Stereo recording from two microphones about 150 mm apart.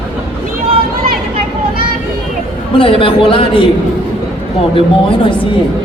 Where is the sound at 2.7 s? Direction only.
35° left (ahead or behind).